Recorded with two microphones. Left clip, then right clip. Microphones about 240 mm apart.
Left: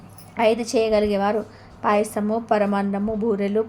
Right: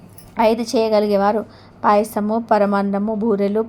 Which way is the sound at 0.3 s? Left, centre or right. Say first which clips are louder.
Right 3 dB; centre.